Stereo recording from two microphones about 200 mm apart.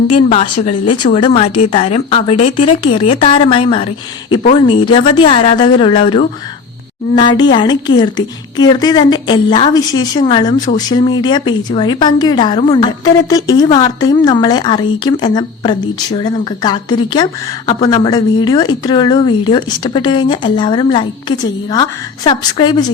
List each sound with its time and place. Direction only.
0.1 s speech: 30° left (ahead or behind)